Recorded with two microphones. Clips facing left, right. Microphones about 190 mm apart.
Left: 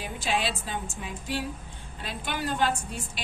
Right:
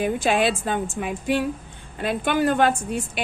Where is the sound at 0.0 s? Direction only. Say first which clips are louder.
Right 9 dB; 55° right (ahead or behind).